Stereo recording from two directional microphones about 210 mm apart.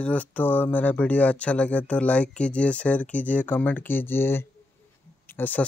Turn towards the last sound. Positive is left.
turn(degrees=10)  # may be behind; listen again after turning